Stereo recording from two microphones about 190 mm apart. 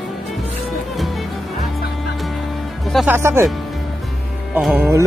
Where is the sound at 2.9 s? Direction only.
10° right (ahead or behind).